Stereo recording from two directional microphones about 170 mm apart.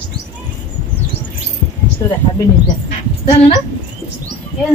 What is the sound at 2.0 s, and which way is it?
Speech, 20° left (ahead or behind).